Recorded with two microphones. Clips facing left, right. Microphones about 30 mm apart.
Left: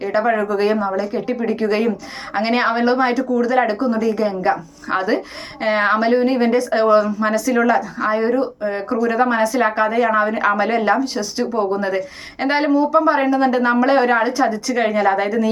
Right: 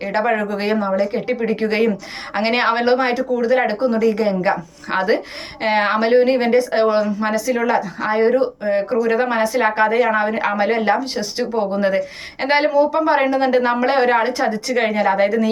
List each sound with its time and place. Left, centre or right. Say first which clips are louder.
0.0 s a woman's voice: left 1 dB; right
2.7 s speech: right 1 dB; right
3.0 s a woman's voice: left 1 dB; right
6.7 s speech: left 2 dB; centre
7.9 s a woman's voice: right 1 dB; right
8.3 s speech: right 2 dB; right
8.7 s a woman's voice: right 3 dB; right
11.0 s speech: left 1 dB; right
11.5 s a woman's voice: right 2 dB; right